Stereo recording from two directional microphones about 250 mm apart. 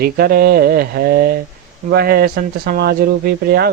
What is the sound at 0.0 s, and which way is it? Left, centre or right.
Speech, right.